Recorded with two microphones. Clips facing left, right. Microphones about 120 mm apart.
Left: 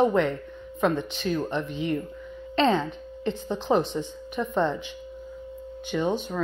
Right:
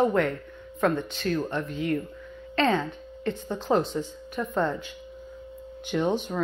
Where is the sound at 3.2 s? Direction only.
25° left (ahead or behind).